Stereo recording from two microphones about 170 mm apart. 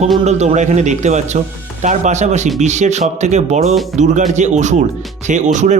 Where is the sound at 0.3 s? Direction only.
40° right (ahead or behind).